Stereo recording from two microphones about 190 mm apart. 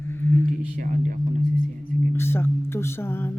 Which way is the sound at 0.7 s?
40° right (ahead or behind).